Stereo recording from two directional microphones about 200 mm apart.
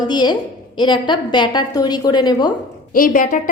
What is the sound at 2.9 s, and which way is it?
Speech, 45° left (ahead or behind).